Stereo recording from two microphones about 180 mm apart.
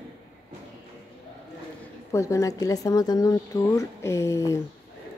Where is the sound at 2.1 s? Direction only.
15° left (ahead or behind).